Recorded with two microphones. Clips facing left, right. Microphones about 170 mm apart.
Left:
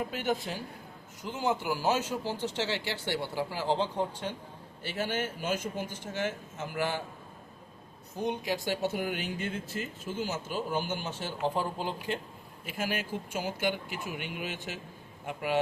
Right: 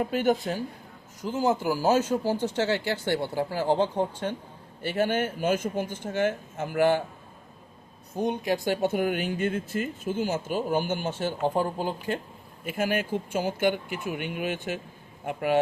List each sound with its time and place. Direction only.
0.1 s a man's voice: 50° right (ahead or behind)
8.1 s speech: 50° right (ahead or behind)